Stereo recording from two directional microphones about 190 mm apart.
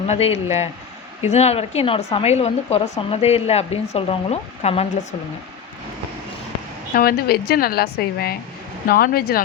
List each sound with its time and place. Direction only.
0.1 s speech: 35° left (ahead or behind)
6.9 s a woman's voice: 55° left (ahead or behind)